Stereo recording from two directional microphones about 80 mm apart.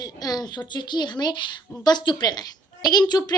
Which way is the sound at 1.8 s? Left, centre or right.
Left.